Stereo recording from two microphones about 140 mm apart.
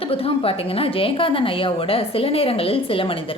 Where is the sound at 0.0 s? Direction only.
45° left (ahead or behind).